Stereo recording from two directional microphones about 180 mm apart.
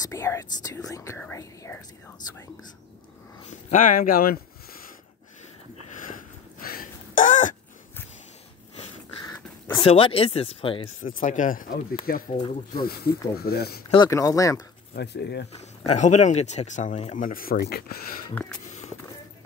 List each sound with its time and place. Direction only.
0.0 s speech: 15° left (ahead or behind)
3.7 s speech: 50° left (ahead or behind)
6.6 s a sound: 50° left (ahead or behind)
9.8 s speech: 30° left (ahead or behind)
11.0 s speech: 50° left (ahead or behind)
12.3 s speech: 25° left (ahead or behind)
12.7 s speech: 55° left (ahead or behind)
13.8 s speech: 25° left (ahead or behind)
15.0 s speech: 65° left (ahead or behind)
15.5 s speech: 35° left (ahead or behind); by 18.2 s 55° left (ahead or behind)
18.3 s speech: 5° left (ahead or behind)